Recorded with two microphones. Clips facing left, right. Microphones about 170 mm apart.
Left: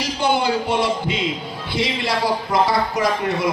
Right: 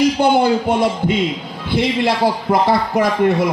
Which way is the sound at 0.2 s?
55° right (ahead or behind).